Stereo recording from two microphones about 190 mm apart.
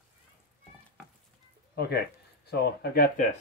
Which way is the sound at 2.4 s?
60° left (ahead or behind).